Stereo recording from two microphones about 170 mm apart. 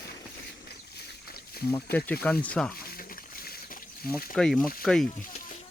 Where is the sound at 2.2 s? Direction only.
10° left (ahead or behind).